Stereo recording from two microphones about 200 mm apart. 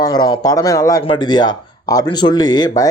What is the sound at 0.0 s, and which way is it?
Speech, 20° left (ahead or behind).